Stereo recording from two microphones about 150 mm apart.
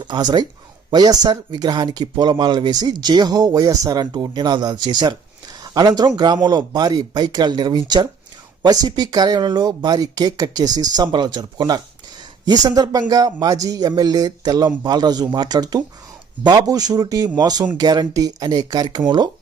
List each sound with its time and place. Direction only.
0.0 s speech: 30° right (ahead or behind)